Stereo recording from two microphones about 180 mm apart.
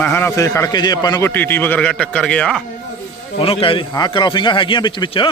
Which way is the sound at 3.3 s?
30° left (ahead or behind).